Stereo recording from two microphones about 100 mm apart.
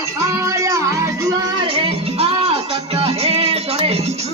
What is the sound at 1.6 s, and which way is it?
Music, 65° right (ahead or behind).